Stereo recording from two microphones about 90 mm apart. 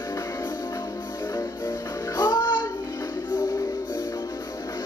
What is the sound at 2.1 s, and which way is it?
Music, 50° left (ahead or behind).